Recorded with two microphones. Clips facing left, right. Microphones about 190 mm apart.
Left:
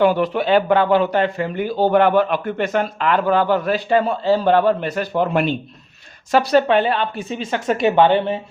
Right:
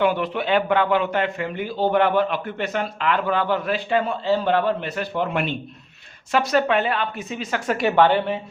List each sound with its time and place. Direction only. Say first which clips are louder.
0.0 s a man's voice: left 5 dB; 40° left (ahead or behind); by 8.4 s 20° left (ahead or behind)